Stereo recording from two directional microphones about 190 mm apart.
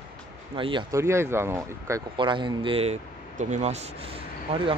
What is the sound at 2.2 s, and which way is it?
A man's voice, 25° right (ahead or behind).